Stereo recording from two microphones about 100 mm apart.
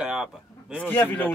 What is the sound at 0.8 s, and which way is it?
Speech, 15° left (ahead or behind).